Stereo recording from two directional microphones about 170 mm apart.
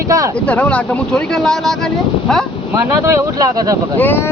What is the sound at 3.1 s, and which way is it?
Speech, 20° right (ahead or behind).